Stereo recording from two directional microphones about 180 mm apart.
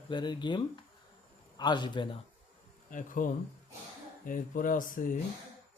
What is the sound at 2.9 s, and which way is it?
Speech, 45° left (ahead or behind).